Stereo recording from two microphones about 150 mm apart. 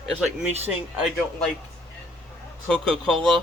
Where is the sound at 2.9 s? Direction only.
35° right (ahead or behind).